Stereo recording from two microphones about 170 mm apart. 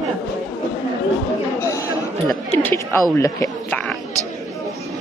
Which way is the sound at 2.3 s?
15° left (ahead or behind).